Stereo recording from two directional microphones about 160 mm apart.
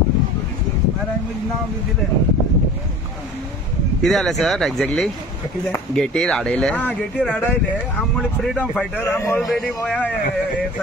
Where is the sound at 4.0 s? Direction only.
Centre (ahead or behind); by 9.4 s 15° left (ahead or behind).